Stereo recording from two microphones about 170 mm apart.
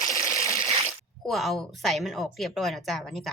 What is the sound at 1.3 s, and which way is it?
Speech, centre (ahead or behind).